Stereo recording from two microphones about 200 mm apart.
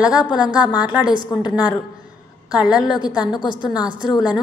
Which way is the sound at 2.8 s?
20° left (ahead or behind).